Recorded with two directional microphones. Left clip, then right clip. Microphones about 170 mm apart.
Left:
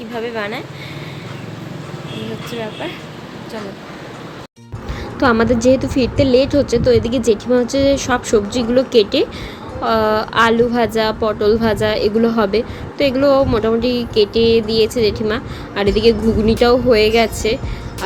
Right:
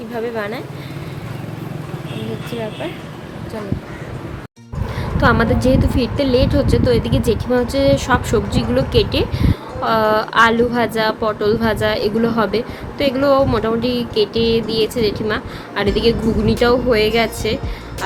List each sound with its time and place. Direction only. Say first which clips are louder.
0.2 s speech: even; centre (ahead or behind)
5.1 s speech: left 1 dB; 10° left (ahead or behind)